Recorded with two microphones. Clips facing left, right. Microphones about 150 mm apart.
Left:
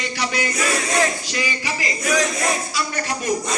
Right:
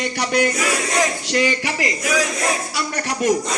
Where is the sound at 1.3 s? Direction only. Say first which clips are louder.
Right 6 dB; 65° right (ahead or behind).